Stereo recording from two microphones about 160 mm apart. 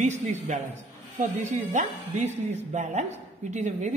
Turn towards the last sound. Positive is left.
turn(degrees=-45)  # may be behind; listen again after turning